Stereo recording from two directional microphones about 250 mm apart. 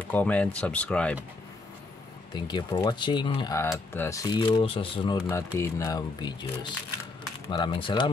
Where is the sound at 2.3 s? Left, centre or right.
Centre.